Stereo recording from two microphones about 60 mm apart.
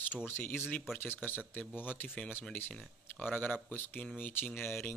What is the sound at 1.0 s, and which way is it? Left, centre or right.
Speech, left.